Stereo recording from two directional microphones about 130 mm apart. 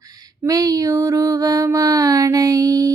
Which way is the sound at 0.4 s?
25° right (ahead or behind).